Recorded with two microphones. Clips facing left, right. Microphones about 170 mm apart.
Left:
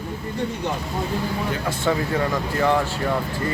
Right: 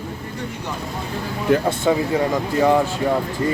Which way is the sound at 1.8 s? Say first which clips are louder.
Right 3 dB; 20° right (ahead or behind).